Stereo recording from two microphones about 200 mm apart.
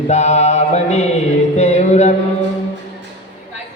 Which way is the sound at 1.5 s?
35° left (ahead or behind).